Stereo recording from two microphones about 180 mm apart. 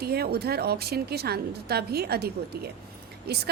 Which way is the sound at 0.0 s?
60° right (ahead or behind).